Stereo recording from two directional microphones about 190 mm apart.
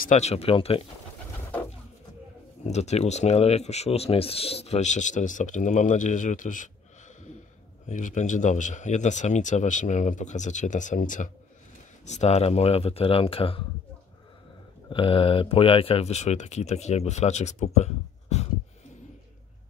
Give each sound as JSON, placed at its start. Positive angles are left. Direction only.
{"t": 0.0, "sound": "speech", "side_deg": 40}
{"t": 2.6, "sound": "speech", "side_deg": 35}
{"t": 7.8, "sound": "speech", "side_deg": 40}
{"t": 14.9, "sound": "speech", "side_deg": 30}